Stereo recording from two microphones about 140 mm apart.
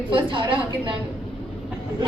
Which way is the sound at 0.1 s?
35° right (ahead or behind).